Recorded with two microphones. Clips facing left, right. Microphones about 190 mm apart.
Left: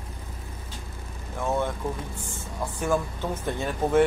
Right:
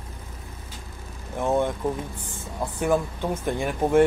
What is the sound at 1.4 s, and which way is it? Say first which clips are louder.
Speech: right 4 dB; 15° right (ahead or behind).